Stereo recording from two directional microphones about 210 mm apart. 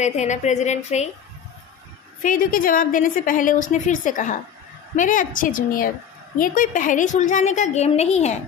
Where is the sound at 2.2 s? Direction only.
40° left (ahead or behind).